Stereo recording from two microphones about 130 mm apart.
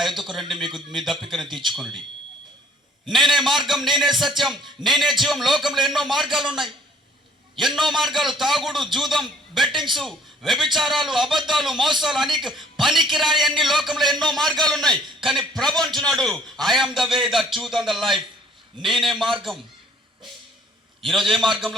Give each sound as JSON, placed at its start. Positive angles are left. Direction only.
{"t": 0.2, "sound": "a man's voice", "side_deg": 0}
{"t": 3.1, "sound": "a man's voice", "side_deg": 0}
{"t": 21.0, "sound": "a man's voice", "side_deg": 0}